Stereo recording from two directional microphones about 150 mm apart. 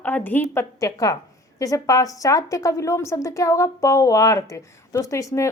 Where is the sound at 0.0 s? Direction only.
10° left (ahead or behind).